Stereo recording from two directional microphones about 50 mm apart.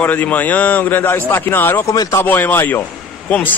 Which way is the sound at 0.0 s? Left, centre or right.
Left.